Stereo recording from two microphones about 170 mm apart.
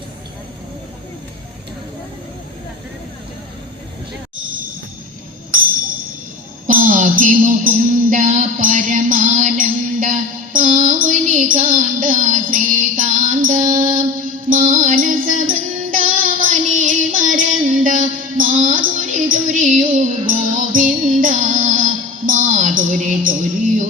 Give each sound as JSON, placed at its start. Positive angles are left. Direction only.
{"t": 6.7, "sound": "music", "side_deg": -50}